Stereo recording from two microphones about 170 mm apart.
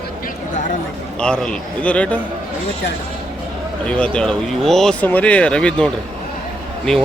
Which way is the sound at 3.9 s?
5° left (ahead or behind).